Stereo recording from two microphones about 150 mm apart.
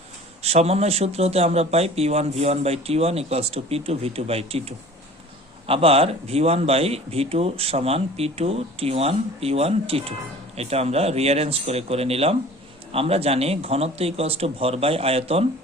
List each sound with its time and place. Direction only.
0.4 s a man's voice: 45° right (ahead or behind)